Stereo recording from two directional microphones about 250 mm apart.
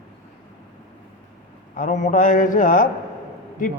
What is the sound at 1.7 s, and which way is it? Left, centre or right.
A man's voice, left.